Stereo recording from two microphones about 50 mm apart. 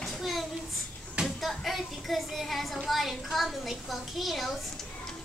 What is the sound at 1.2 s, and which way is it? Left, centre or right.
A child's voice, centre.